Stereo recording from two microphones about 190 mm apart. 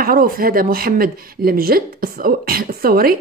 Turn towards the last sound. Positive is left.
turn(degrees=-50)  # may be behind; listen again after turning